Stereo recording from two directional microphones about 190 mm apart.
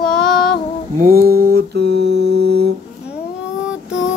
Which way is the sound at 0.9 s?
50° right (ahead or behind).